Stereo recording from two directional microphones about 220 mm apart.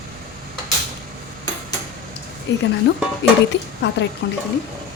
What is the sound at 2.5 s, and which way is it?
Speech, 55° left (ahead or behind).